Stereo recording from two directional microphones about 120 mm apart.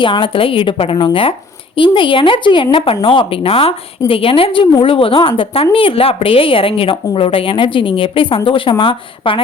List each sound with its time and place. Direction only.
0.0 s a woman's voice: 45° left (ahead or behind)